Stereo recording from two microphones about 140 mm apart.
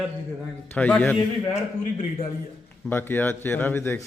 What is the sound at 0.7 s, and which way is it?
Speech, 10° left (ahead or behind).